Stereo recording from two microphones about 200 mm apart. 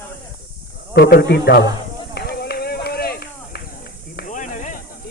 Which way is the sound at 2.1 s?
50° left (ahead or behind).